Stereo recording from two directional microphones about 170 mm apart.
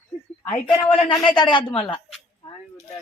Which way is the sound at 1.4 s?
25° left (ahead or behind).